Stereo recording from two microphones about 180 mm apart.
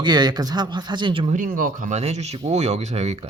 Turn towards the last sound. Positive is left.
turn(degrees=-35)  # may be behind; listen again after turning